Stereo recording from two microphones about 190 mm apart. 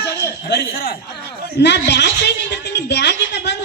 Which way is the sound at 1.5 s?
65° left (ahead or behind).